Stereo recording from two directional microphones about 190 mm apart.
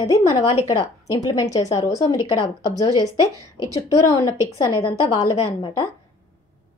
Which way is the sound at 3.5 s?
20° left (ahead or behind).